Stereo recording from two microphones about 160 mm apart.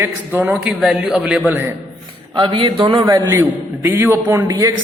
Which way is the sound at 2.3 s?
30° right (ahead or behind).